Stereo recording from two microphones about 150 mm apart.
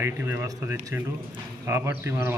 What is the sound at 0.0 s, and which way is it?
A man's voice, 15° right (ahead or behind).